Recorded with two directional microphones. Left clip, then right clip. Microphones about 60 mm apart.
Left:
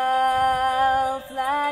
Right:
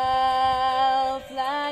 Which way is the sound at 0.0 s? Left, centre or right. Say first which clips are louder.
Left 1 dB; right.